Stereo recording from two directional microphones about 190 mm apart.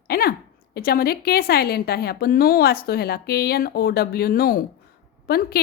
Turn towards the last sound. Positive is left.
turn(degrees=55)  # may be behind; listen again after turning